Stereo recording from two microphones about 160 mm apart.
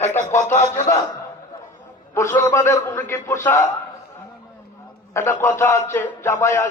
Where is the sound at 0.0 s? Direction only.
15° left (ahead or behind).